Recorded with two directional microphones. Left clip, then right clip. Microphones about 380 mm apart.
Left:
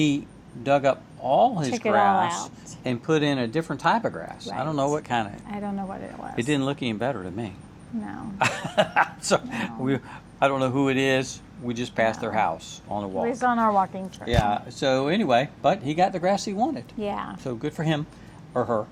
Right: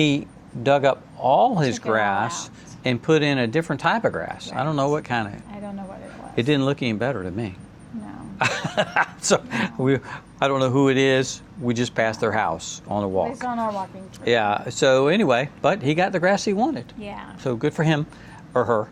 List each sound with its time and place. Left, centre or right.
0.6 s speech: right
5.5 s speech: left
6.3 s speech: right
13.2 s speech: left
14.3 s speech: right
17.0 s speech: left
17.4 s speech: centre